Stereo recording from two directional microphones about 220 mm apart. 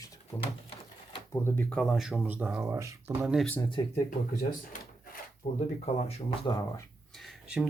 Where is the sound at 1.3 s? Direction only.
10° left (ahead or behind).